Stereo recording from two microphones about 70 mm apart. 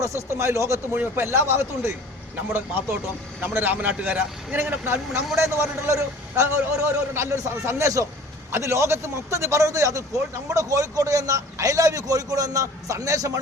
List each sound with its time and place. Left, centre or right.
0.2 s a man's voice: right
3.4 s a man's voice: right